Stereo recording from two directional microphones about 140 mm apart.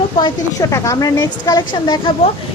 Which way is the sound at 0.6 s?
20° left (ahead or behind).